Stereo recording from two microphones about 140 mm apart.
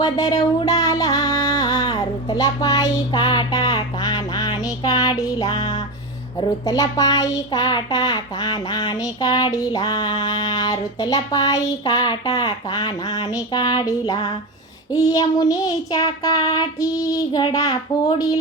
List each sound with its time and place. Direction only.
0.0 s music: 25° left (ahead or behind)
6.7 s a child's voice: 25° left (ahead or behind)